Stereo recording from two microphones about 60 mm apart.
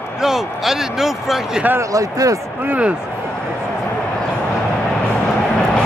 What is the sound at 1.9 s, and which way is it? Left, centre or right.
Speech, right.